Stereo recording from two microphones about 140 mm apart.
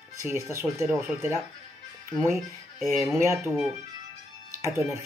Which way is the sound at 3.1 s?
20° right (ahead or behind).